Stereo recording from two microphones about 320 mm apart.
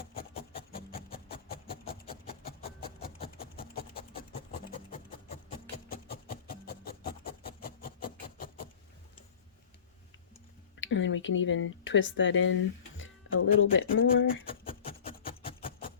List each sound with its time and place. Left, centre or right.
0.2 s a sound: centre
0.9 s music: centre
1.5 s a sound: left
2.5 s rub: left
3.6 s rub: centre
10.8 s speech: left
14.8 s music: centre